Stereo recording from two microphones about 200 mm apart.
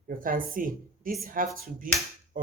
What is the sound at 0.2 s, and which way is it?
Speech, 45° right (ahead or behind).